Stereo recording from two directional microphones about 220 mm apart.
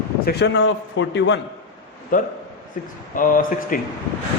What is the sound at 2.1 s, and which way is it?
A man's voice, 40° left (ahead or behind).